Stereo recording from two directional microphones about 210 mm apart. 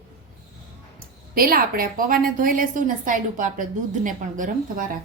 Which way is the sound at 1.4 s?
45° right (ahead or behind).